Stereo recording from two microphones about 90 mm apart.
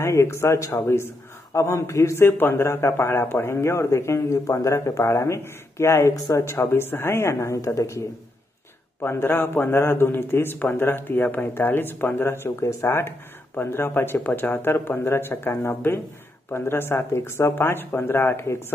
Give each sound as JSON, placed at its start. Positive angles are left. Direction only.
{"t": 0.0, "sound": "a man's voice", "side_deg": 35}
{"t": 9.0, "sound": "a man's voice", "side_deg": 25}